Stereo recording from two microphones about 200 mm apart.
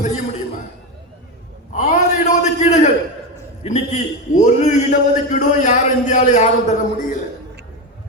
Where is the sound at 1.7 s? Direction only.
35° left (ahead or behind).